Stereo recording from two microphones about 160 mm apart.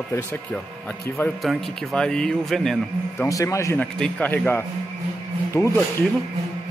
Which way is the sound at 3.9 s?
5° left (ahead or behind).